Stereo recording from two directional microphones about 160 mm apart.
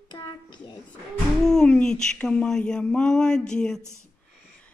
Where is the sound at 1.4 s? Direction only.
5° left (ahead or behind).